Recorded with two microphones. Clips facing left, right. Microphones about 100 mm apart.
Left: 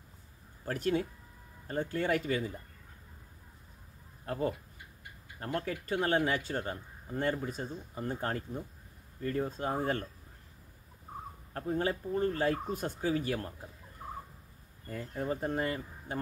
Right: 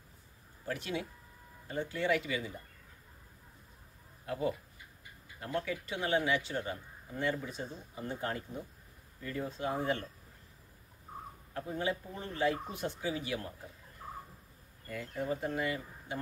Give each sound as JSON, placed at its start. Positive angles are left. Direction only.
{"t": 0.7, "sound": "speech", "side_deg": 45}
{"t": 4.3, "sound": "speech", "side_deg": 45}
{"t": 11.5, "sound": "speech", "side_deg": 45}
{"t": 14.9, "sound": "speech", "side_deg": 40}